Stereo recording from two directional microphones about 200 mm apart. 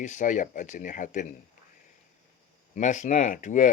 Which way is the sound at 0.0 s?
40° left (ahead or behind).